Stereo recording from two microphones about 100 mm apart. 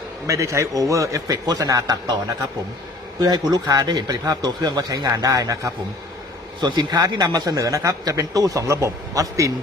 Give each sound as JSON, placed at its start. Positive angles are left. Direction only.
{"t": 0.3, "sound": "a man's voice", "side_deg": -30}
{"t": 3.2, "sound": "a man's voice", "side_deg": -40}